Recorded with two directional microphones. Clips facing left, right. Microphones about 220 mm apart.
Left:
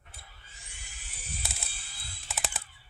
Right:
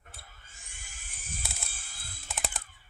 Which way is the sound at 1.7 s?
50° right (ahead or behind).